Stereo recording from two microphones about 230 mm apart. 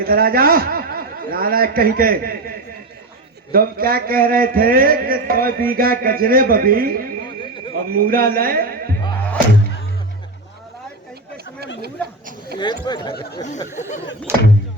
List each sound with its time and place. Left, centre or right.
0.0 s a sound: right
11.8 s speech: right
12.5 s speech: centre
13.1 s speech: left
14.3 s speech: centre